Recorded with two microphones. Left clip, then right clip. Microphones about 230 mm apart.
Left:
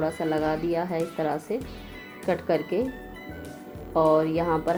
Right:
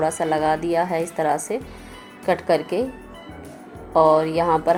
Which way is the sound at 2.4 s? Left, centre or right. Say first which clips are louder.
Right 4 dB; right.